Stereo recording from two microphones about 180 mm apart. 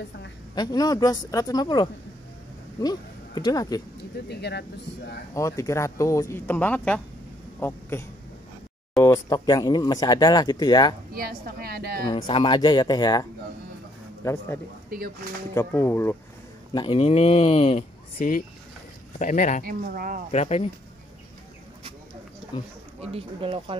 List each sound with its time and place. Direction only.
0.6 s speech: 20° left (ahead or behind)
4.3 s speech: 65° left (ahead or behind)
5.3 s speech: 15° left (ahead or behind)
11.1 s a woman's voice: 55° right (ahead or behind)
12.1 s speech: 25° left (ahead or behind)
14.9 s speech: 55° right (ahead or behind)
15.5 s speech: 15° left (ahead or behind)
16.7 s speech: 30° left (ahead or behind); by 19.6 s 45° left (ahead or behind)
19.6 s speech: 50° right (ahead or behind)
20.2 s speech: 35° left (ahead or behind)
23.1 s speech: 30° right (ahead or behind)